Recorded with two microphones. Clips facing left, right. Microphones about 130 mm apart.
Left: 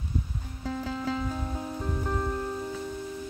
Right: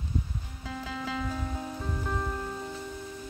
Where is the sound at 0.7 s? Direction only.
40° left (ahead or behind).